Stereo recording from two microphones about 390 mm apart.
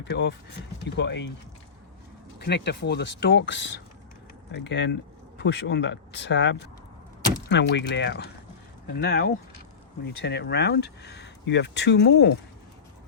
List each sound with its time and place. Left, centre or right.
0.0 s speech: left
2.4 s speech: left